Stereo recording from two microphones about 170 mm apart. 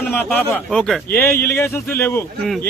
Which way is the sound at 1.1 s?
15° left (ahead or behind).